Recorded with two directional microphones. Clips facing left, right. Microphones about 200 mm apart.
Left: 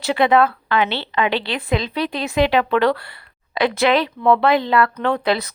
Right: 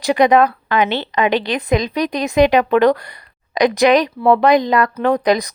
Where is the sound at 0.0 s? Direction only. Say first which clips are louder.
Right 3 dB; 15° right (ahead or behind).